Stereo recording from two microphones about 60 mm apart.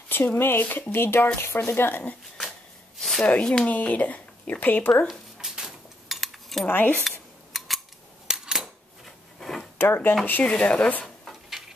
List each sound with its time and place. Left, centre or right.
0.1 s speech: left
3.0 s a sound: centre
3.4 s speech: centre
3.7 s speech: left
5.4 s cutlery: centre
6.7 s speech: left
7.1 s a sound: centre
8.3 s camera: centre
9.0 s a sound: centre
9.8 s speech: left
10.4 s speech: centre